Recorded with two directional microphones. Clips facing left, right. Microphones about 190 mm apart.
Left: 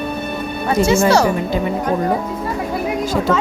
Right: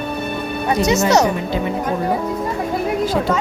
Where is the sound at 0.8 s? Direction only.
20° right (ahead or behind).